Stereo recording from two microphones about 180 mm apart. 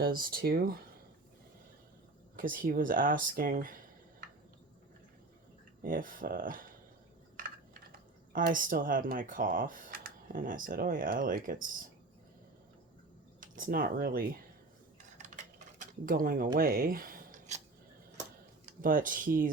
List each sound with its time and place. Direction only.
0.0 s speech: 55° right (ahead or behind)
2.3 s speech: 50° right (ahead or behind)
5.8 s speech: 50° right (ahead or behind)
8.3 s speech: 50° right (ahead or behind)
13.4 s speech: 50° right (ahead or behind)
15.2 s typing: 45° right (ahead or behind)
16.6 s speech: 55° right (ahead or behind)
18.8 s speech: 50° right (ahead or behind)